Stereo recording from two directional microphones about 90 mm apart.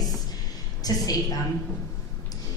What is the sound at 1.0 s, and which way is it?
Speech, 45° left (ahead or behind).